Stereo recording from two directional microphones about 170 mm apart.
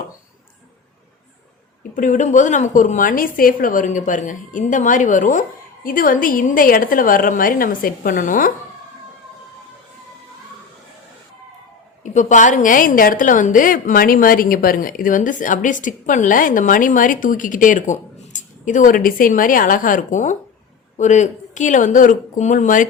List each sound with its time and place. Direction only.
2.0 s a woman's voice: 45° left (ahead or behind)
12.0 s a woman's voice: 45° left (ahead or behind)